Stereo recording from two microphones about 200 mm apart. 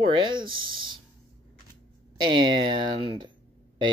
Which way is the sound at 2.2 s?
20° right (ahead or behind).